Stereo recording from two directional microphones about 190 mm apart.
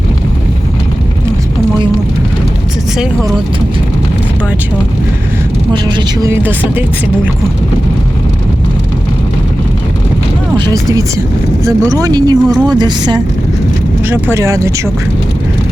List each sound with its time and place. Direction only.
5.7 s speech: 25° right (ahead or behind)
6.3 s speech: 10° right (ahead or behind)
10.6 s speech: 20° right (ahead or behind)
14.1 s speech: 15° right (ahead or behind)